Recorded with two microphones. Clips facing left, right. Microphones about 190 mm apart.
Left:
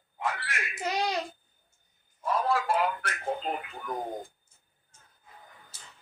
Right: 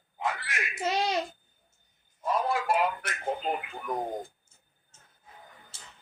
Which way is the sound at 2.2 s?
20° right (ahead or behind).